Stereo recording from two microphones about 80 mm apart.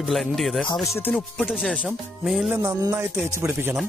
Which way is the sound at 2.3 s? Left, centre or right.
Centre.